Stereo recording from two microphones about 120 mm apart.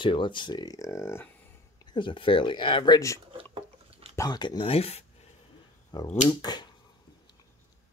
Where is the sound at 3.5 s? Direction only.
50° right (ahead or behind).